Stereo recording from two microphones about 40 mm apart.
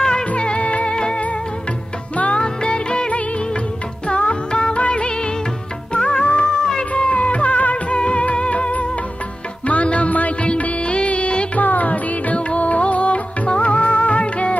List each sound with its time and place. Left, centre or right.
0.0 s music: centre
2.1 s music: left
2.4 s music: left
6.2 s music: left
11.6 s music: left